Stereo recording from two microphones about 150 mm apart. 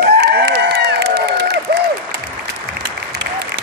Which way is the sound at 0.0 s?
90° right.